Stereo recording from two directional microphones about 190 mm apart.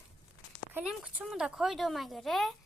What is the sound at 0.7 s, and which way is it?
Speech, 5° right (ahead or behind).